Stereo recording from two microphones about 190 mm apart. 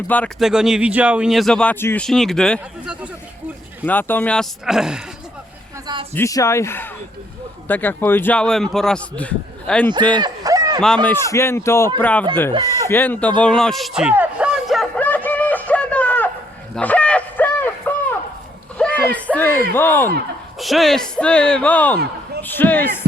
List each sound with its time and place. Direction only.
0.1 s a man's voice: 10° left (ahead or behind)
0.4 s speech: 5° right (ahead or behind)
3.8 s speech: 10° left (ahead or behind)
6.1 s a man's voice: 15° left (ahead or behind)
10.1 s fowl: 20° right (ahead or behind)
10.8 s a man's voice: 5° left (ahead or behind)
13.4 s a sound: 5° left (ahead or behind)
19.7 s a man's voice: 10° left (ahead or behind)
20.6 s speech: centre (ahead or behind)